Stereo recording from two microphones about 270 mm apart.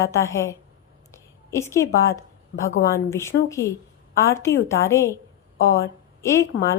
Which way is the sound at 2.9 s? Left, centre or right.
Centre.